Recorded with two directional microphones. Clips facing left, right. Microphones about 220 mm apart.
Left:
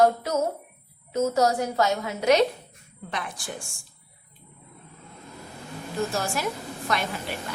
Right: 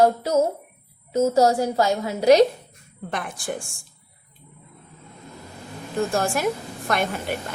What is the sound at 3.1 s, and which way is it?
Speech, 50° right (ahead or behind).